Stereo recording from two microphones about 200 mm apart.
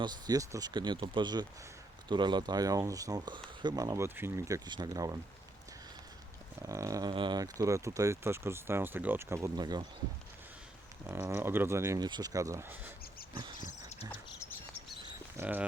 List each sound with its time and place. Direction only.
0.0 s speech: 20° right (ahead or behind)
6.6 s speech: 15° right (ahead or behind)
11.0 s speech: 5° right (ahead or behind)
13.6 s a sound: 35° left (ahead or behind)
15.4 s speech: 10° right (ahead or behind)